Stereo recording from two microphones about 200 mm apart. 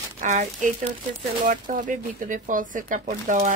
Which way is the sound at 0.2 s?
40° right (ahead or behind).